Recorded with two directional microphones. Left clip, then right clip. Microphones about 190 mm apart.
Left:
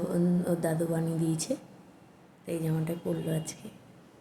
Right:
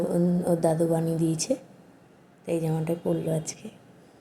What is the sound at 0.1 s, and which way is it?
A woman's voice, 15° right (ahead or behind).